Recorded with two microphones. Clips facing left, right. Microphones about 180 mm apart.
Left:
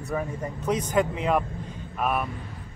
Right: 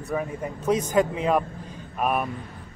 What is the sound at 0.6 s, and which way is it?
Speech, 25° right (ahead or behind).